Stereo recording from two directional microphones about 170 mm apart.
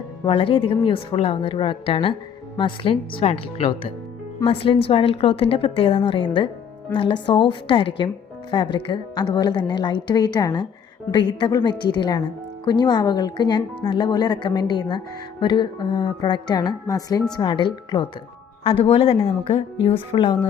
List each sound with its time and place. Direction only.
0.3 s a woman's voice: 30° left (ahead or behind)